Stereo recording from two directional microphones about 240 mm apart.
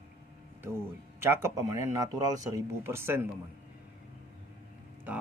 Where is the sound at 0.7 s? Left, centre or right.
Centre.